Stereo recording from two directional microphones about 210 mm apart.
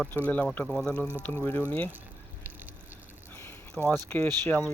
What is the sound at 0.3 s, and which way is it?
Speech, 5° left (ahead or behind).